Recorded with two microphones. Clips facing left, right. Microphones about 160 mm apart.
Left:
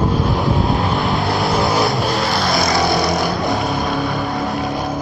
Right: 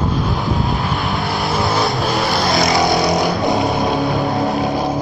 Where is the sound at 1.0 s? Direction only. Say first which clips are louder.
Left 2 dB; centre (ahead or behind).